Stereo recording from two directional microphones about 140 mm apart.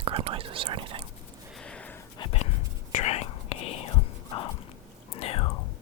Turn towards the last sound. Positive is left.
turn(degrees=45)  # may be behind; listen again after turning